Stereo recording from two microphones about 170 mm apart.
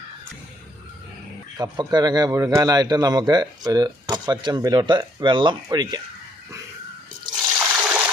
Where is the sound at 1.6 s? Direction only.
25° right (ahead or behind).